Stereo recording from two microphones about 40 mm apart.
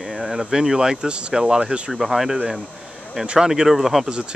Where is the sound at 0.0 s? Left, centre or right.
Centre; by 1.9 s right.